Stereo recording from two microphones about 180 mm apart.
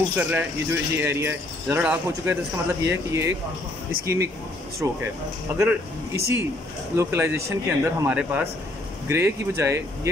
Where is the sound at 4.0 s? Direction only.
15° right (ahead or behind).